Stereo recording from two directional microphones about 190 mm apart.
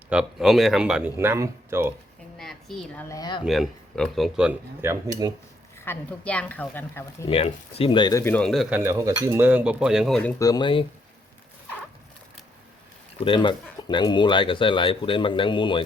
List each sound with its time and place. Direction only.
0.1 s speech: 5° right (ahead or behind)
2.4 s a sound: centre (ahead or behind)
3.1 s speech: 20° left (ahead or behind)
3.4 s speech: centre (ahead or behind)
5.8 s speech: 10° left (ahead or behind)
7.3 s speech: 30° left (ahead or behind)
8.2 s speech: 5° left (ahead or behind)
8.8 s speech: 15° right (ahead or behind); by 10.3 s 5° left (ahead or behind)
10.3 s speech: 20° left (ahead or behind)
13.1 s speech: 25° left (ahead or behind)